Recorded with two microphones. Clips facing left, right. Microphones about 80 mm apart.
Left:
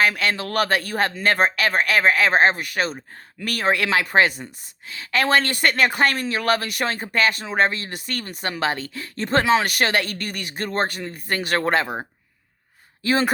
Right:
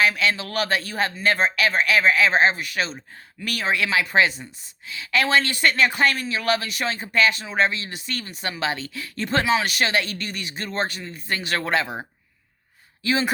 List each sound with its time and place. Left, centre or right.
0.0 s speech: left
13.0 s speech: left